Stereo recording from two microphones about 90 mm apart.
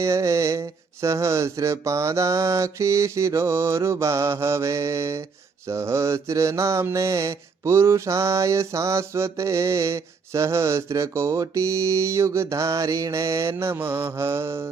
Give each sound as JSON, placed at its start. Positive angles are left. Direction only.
{"t": 0.0, "sound": "mantra", "side_deg": -35}